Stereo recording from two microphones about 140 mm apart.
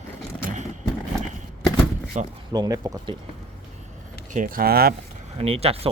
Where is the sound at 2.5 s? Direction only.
25° right (ahead or behind).